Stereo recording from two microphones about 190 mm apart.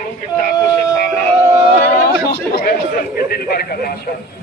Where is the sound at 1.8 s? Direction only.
50° left (ahead or behind).